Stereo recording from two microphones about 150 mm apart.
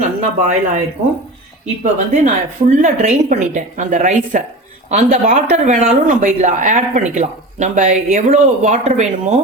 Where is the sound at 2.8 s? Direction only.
60° right (ahead or behind).